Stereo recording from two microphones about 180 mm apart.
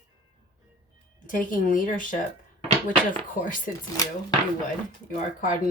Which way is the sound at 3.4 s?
50° left (ahead or behind).